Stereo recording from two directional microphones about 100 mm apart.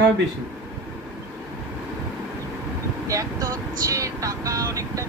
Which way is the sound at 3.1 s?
35° right (ahead or behind).